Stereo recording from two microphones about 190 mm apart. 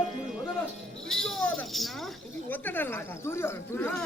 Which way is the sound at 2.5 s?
10° left (ahead or behind).